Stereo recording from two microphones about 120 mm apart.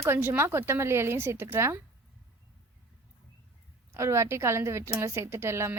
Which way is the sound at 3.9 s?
25° right (ahead or behind).